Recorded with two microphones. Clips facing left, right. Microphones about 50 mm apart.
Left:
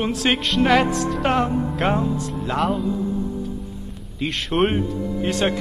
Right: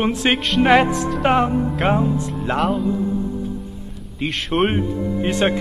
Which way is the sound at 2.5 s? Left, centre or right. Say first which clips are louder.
Right 1 dB; centre.